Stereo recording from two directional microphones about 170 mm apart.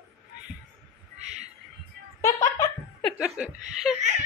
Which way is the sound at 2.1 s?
20° left (ahead or behind).